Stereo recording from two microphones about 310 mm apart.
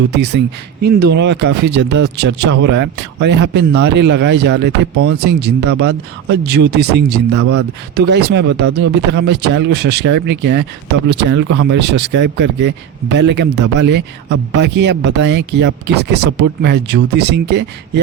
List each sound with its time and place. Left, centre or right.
0.2 s speech: right
4.9 s speech: right
5.2 s speech: right